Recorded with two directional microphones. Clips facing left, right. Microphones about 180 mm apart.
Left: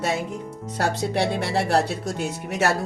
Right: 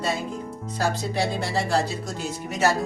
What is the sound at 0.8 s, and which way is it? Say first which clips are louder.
Speech: left 2 dB; 70° left (ahead or behind).